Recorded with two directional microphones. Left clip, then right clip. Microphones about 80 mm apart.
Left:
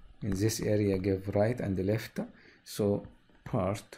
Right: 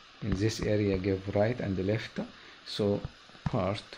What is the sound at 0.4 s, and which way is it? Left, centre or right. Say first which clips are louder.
Speech: even; left.